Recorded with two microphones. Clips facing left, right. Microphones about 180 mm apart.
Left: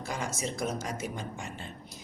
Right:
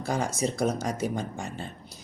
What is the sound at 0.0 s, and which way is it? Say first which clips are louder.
Speech: right 7 dB; 35° right (ahead or behind).